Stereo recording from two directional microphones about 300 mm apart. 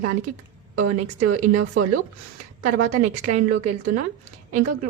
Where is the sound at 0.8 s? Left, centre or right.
Right.